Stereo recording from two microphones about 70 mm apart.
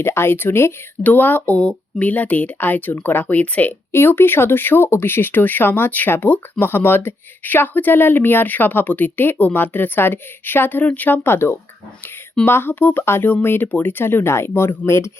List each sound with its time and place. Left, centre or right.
0.0 s speech: left
3.9 s speech: left